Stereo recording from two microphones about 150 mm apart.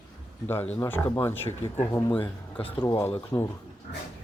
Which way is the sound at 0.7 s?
15° left (ahead or behind).